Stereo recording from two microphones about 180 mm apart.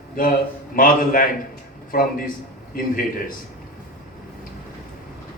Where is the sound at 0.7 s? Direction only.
50° left (ahead or behind).